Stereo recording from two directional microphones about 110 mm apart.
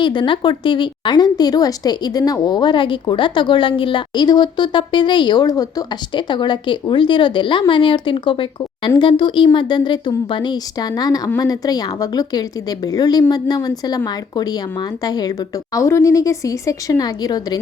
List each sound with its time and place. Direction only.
0.0 s a woman's voice: 45° left (ahead or behind)